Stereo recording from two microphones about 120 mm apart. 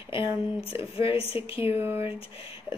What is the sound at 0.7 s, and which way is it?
Speech, 50° left (ahead or behind).